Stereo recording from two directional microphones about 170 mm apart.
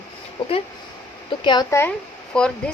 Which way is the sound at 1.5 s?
25° left (ahead or behind).